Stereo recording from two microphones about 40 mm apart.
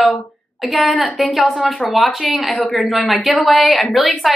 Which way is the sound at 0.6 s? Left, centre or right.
Centre.